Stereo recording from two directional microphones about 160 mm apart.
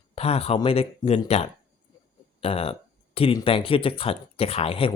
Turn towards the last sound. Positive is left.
turn(degrees=35)  # may be behind; listen again after turning